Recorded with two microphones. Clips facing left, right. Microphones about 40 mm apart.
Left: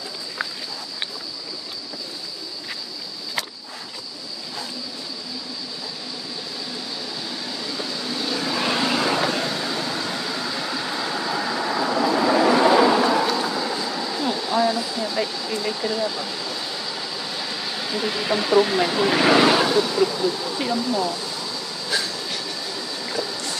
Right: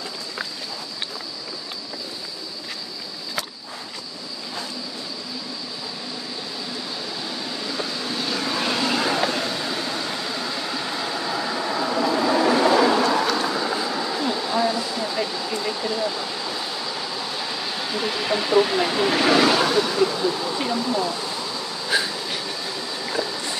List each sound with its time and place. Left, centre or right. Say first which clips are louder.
7.6 s vehicle: right 1 dB; centre
8.6 s vehicle: left 1 dB; centre
14.2 s a sound: left 2 dB; centre
19.1 s vehicle: left 2 dB; centre
19.6 s vehicle: even; centre
20.5 s a sound: even; centre
22.9 s boat: right 2 dB; centre